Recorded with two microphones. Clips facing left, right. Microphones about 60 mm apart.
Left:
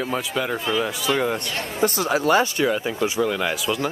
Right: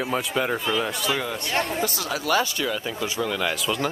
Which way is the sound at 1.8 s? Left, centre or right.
Left.